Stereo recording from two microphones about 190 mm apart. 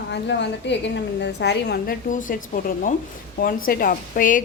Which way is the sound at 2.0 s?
45° left (ahead or behind).